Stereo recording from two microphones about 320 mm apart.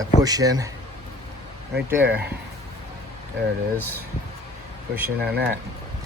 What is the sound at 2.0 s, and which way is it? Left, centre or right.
Speech, right.